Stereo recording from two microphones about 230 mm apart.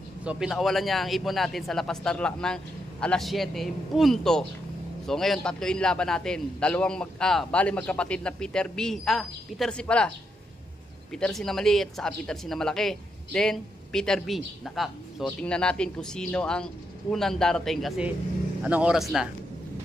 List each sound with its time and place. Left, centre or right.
0.2 s speech: centre